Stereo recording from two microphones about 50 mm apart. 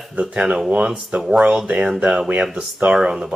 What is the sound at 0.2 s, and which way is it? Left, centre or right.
Speech, centre.